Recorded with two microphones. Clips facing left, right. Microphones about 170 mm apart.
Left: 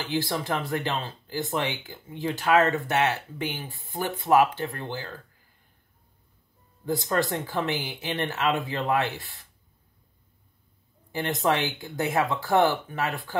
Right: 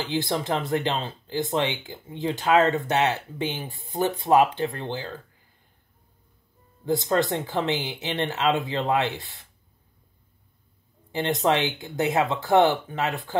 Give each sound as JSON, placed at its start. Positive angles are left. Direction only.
{"t": 0.1, "sound": "speech", "side_deg": -25}
{"t": 6.9, "sound": "speech", "side_deg": -20}
{"t": 11.1, "sound": "speech", "side_deg": -20}